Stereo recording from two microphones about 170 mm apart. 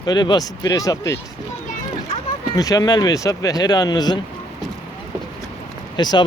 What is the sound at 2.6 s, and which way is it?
Speech, 20° left (ahead or behind).